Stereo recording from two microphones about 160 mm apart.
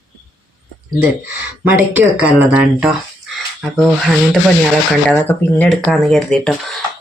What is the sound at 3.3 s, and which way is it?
Speech, centre (ahead or behind).